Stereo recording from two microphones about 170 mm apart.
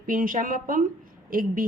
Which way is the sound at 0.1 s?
55° right (ahead or behind).